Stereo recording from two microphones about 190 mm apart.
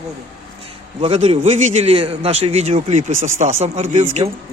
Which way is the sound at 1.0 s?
35° right (ahead or behind).